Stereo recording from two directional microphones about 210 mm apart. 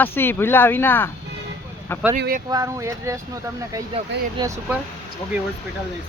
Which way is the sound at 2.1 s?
40° right (ahead or behind).